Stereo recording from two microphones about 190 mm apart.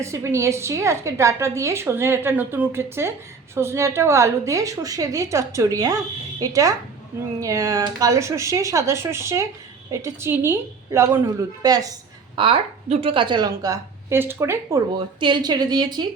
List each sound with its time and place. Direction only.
0.0 s a woman's voice: 15° right (ahead or behind)